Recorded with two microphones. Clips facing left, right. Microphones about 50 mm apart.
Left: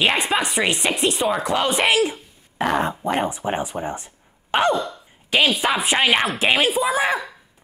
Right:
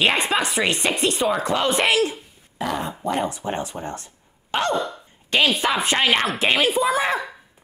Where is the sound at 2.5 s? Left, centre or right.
Left.